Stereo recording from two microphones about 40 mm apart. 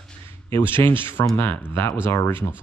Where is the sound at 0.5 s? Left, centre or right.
Left.